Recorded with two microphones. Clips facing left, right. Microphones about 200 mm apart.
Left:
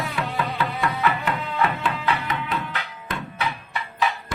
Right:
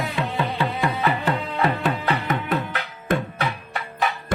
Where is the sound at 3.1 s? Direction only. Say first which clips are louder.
Right 6 dB; 50° right (ahead or behind).